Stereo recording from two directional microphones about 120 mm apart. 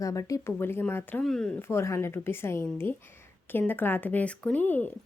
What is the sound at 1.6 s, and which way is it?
Speech, 20° left (ahead or behind).